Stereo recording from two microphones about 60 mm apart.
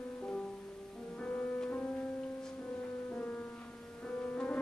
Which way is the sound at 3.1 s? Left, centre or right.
Left.